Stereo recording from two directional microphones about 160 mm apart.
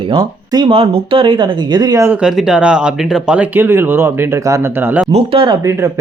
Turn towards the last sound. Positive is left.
turn(degrees=-35)  # may be behind; listen again after turning